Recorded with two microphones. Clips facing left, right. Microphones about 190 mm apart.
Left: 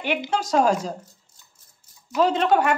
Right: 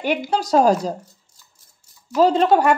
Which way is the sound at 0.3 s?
35° right (ahead or behind).